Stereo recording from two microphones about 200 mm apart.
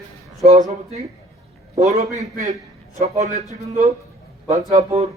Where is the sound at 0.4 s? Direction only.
35° right (ahead or behind).